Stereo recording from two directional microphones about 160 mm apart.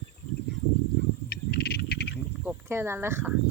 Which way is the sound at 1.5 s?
80° left.